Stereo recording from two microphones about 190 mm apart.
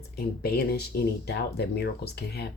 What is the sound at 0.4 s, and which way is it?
Speech, 55° left (ahead or behind).